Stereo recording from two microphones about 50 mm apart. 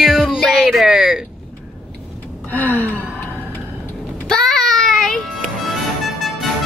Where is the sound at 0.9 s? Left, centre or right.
Centre.